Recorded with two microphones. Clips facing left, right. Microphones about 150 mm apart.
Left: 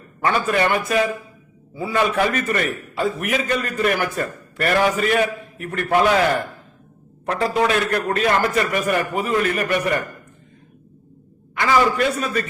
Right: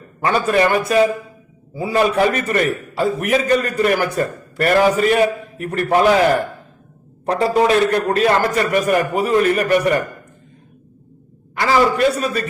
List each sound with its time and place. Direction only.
0.3 s a man's voice: 35° right (ahead or behind)
11.5 s a man's voice: 35° right (ahead or behind)